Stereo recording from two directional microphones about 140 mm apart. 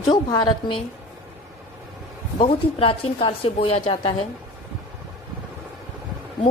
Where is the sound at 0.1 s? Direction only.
30° left (ahead or behind).